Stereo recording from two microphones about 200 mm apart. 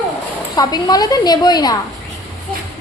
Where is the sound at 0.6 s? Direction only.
20° left (ahead or behind).